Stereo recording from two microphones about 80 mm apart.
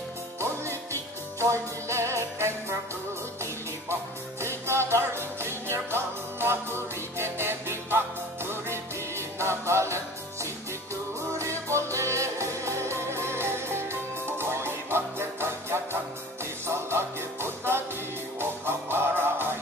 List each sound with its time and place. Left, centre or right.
1.4 s music: right
3.9 s music: right